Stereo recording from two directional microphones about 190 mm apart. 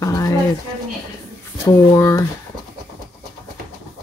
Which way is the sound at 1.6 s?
15° left (ahead or behind).